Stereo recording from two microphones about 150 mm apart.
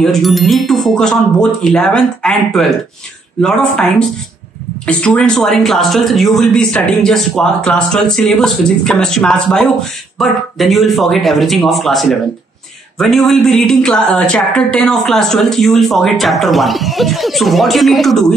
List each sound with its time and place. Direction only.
0.0 s speech: centre (ahead or behind)
4.8 s speech: 5° left (ahead or behind)